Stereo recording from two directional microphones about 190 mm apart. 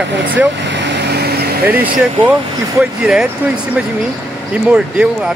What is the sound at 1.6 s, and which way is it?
Speech, 5° right (ahead or behind).